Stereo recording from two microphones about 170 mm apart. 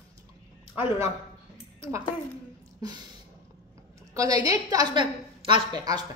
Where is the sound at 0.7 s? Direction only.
15° right (ahead or behind).